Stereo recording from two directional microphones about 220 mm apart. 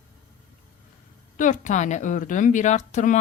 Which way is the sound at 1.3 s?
35° left (ahead or behind).